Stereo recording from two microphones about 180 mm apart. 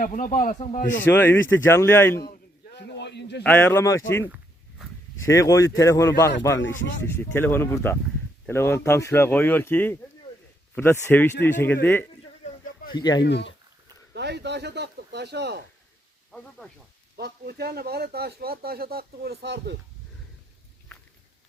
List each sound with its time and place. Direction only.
0.0 s a man's voice: 50° left (ahead or behind)
1.0 s speech: 10° left (ahead or behind)
2.7 s a sound: 70° left (ahead or behind)
3.4 s speech: 10° left (ahead or behind)
5.3 s speech: 15° left (ahead or behind)
12.9 s speech: 25° left (ahead or behind)
13.2 s speech: 70° left (ahead or behind)
14.1 s speech: 70° right (ahead or behind)
17.2 s speech: 65° right (ahead or behind)